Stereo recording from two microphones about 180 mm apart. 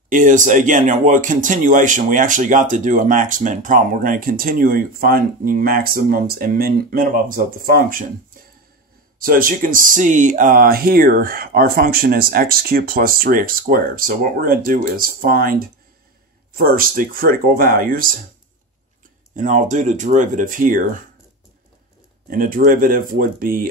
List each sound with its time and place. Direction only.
0.1 s speech: 45° right (ahead or behind)
19.3 s speech: 45° right (ahead or behind)
22.3 s speech: 50° right (ahead or behind)